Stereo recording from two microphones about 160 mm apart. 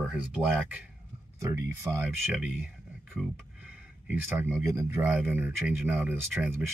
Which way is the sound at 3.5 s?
10° right (ahead or behind).